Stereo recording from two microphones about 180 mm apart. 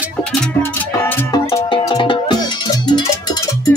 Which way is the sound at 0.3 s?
10° left (ahead or behind).